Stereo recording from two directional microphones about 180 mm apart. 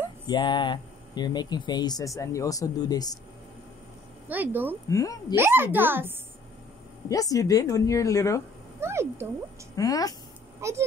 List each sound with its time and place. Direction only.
0.3 s speech: 25° left (ahead or behind)
4.3 s a child's voice: 10° right (ahead or behind)
4.8 s speech: 20° left (ahead or behind)
5.3 s a child's voice: 10° right (ahead or behind)
7.1 s speech: 20° left (ahead or behind)
8.8 s speech: 15° right (ahead or behind)
9.8 s speech: 20° left (ahead or behind)
10.6 s a child's voice: 15° right (ahead or behind)